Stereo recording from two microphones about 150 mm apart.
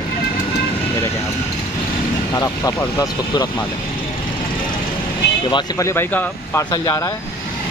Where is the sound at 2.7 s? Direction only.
20° left (ahead or behind).